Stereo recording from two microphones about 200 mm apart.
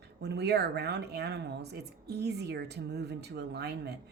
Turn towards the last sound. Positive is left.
turn(degrees=-55)  # may be behind; listen again after turning